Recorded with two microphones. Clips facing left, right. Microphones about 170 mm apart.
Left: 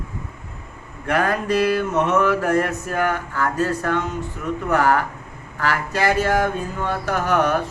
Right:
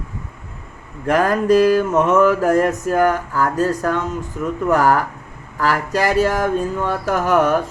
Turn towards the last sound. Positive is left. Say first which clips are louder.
# right 4 dB
turn(degrees=-45)  # may be behind; listen again after turning